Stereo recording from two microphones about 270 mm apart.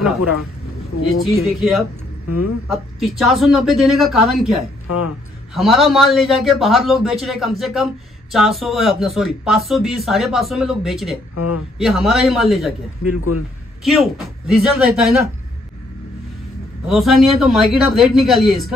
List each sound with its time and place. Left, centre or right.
0.2 s speech: left
1.4 s a man's voice: centre
2.2 s speech: left
3.2 s a man's voice: centre
4.8 s speech: left
5.5 s a man's voice: centre
11.3 s speech: left
11.8 s a man's voice: centre
13.1 s speech: left
13.8 s a man's voice: centre
16.8 s a man's voice: centre